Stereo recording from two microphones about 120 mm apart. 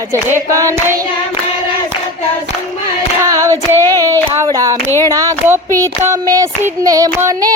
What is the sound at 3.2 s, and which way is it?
Child singing, 25° right (ahead or behind).